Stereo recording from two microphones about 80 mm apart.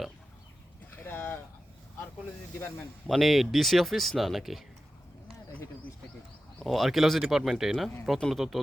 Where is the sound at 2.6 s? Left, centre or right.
Left.